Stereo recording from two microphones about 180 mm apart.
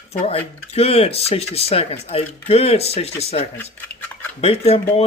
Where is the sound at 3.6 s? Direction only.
10° left (ahead or behind).